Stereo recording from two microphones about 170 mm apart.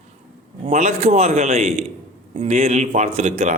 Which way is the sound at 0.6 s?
40° right (ahead or behind).